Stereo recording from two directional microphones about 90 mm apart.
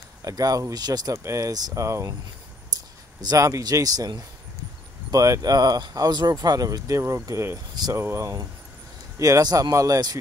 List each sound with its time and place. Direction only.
0.2 s speech: 40° right (ahead or behind)
1.1 s speech: 35° right (ahead or behind)
3.2 s speech: 40° right (ahead or behind)